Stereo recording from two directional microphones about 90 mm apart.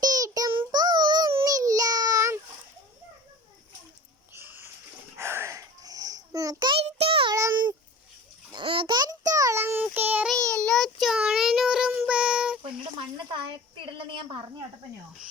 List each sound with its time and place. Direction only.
0.0 s child singing: 45° right (ahead or behind)
1.5 s child singing: 40° right (ahead or behind)
4.3 s a sound: 25° right (ahead or behind); by 6.6 s 40° right (ahead or behind)
6.7 s child singing: 85° right
8.5 s bathtub: 70° right (ahead or behind)
9.0 s a sound: 45° right (ahead or behind)
9.6 s child singing: 25° right (ahead or behind)
10.3 s child singing: 10° left (ahead or behind); by 12.5 s 10° right (ahead or behind)
13.8 s a sound: 65° right (ahead or behind)